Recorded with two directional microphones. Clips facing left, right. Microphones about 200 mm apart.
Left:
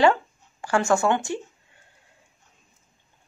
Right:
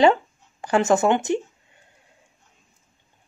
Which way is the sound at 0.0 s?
20° right (ahead or behind).